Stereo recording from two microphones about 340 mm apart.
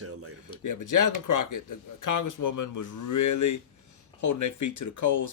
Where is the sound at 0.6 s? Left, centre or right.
Left.